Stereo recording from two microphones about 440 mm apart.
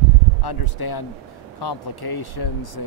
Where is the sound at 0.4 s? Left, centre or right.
Left.